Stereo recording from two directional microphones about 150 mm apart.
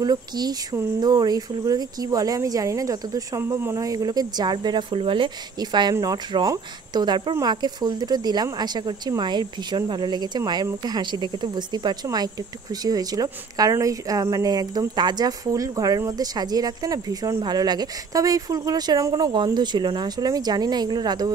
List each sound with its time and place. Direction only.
0.0 s speech: 25° right (ahead or behind)